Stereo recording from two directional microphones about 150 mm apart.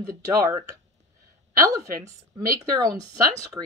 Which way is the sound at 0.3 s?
20° right (ahead or behind).